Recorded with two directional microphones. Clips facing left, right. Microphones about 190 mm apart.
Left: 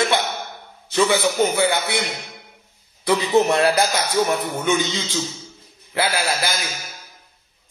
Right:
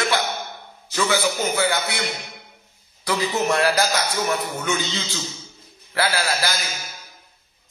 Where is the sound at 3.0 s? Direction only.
25° left (ahead or behind).